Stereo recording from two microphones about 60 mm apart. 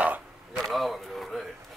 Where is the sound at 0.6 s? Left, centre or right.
Centre.